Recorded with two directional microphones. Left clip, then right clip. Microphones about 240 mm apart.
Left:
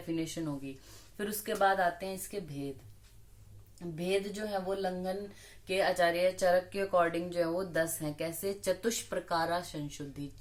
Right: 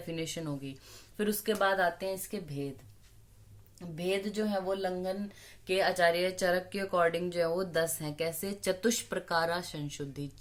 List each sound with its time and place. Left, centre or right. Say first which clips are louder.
0.1 s speech: left 1 dB; right
3.8 s speech: even; right